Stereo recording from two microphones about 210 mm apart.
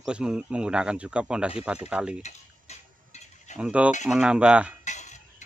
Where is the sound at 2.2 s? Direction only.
30° left (ahead or behind).